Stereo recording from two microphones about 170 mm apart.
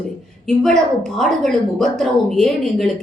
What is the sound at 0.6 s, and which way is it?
A woman's voice, 5° left (ahead or behind).